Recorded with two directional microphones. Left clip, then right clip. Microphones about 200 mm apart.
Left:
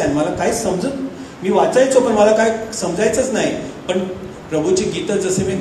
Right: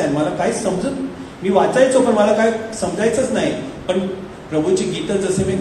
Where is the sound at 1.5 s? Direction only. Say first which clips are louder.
Left 1 dB; 55° left (ahead or behind).